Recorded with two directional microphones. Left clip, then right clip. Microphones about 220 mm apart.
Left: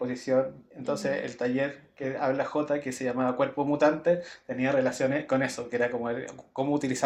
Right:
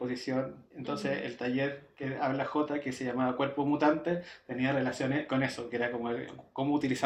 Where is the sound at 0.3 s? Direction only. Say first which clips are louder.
Left 8 dB; 25° left (ahead or behind).